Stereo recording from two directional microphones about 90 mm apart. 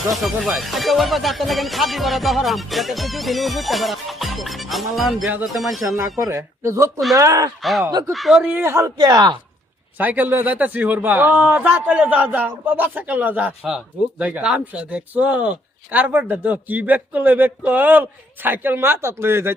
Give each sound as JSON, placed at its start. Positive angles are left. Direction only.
{"t": 0.1, "sound": "speech", "side_deg": -5}
{"t": 6.0, "sound": "speech", "side_deg": -35}
{"t": 7.6, "sound": "speech", "side_deg": 0}
{"t": 7.9, "sound": "speech", "side_deg": -45}
{"t": 8.1, "sound": "speech", "side_deg": -5}
{"t": 8.5, "sound": "speech", "side_deg": -30}
{"t": 10.0, "sound": "a man's voice", "side_deg": -20}